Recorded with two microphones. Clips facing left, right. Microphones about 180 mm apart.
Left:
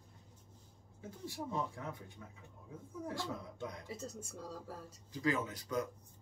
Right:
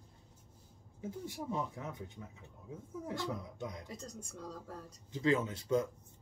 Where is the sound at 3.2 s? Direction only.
20° right (ahead or behind).